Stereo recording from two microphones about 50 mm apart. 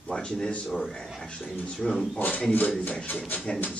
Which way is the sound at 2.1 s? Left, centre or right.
Left.